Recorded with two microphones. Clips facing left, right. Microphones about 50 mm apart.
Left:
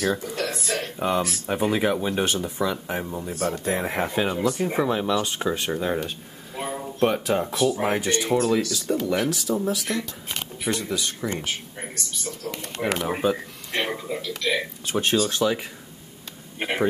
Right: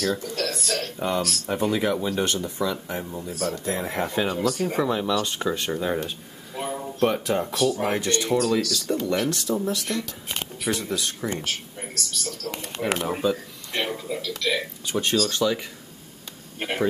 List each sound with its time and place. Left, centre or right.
0.0 s speech: left
3.3 s speech: left
3.8 s speech: centre
5.2 s speech: centre
7.8 s speech: centre
8.8 s speech: centre
11.2 s speech: centre; by 13.4 s left
13.7 s a sound: left
14.9 s speech: centre